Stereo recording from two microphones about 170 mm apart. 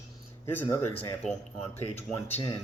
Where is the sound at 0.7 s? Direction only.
20° left (ahead or behind).